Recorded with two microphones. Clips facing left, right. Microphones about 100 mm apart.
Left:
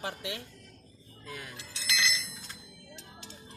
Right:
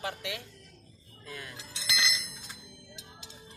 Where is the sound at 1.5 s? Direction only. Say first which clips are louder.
Left 1 dB; 25° right (ahead or behind).